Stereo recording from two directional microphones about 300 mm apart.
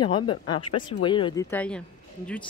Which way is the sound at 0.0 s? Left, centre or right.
Centre.